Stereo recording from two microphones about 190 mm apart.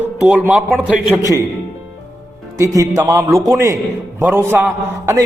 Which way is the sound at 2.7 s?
20° right (ahead or behind).